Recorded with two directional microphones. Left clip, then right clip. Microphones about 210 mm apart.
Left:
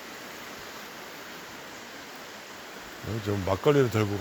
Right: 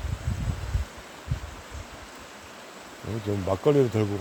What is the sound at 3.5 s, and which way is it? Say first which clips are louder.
Speech: right 1 dB; 20° right (ahead or behind).